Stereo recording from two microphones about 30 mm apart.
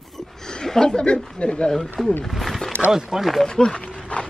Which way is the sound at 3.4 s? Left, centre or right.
Left.